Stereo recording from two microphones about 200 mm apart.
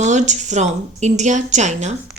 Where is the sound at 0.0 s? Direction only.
35° right (ahead or behind).